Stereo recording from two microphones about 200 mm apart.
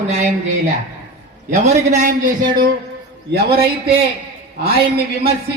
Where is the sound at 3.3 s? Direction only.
50° right (ahead or behind).